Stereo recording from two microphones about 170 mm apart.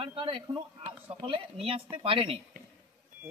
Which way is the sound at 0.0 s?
30° right (ahead or behind).